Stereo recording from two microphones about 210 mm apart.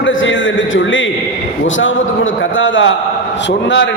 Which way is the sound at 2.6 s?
65° left (ahead or behind).